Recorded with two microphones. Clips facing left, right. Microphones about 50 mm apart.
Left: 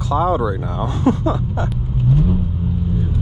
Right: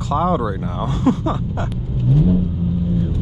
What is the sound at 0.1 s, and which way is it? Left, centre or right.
Speech, right.